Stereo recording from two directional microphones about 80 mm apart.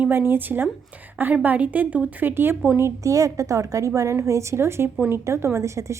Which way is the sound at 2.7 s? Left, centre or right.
Right.